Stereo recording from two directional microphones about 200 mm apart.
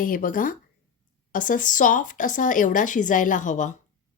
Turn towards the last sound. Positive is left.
turn(degrees=40)  # may be behind; listen again after turning